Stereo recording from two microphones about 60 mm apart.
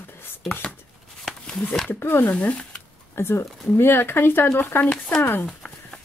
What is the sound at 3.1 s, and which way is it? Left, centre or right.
Speech, left.